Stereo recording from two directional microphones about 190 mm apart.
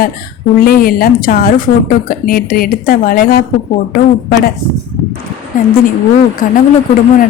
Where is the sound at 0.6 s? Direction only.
50° left (ahead or behind).